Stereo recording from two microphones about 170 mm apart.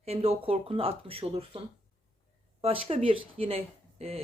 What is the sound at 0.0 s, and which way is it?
A woman's voice, 35° right (ahead or behind).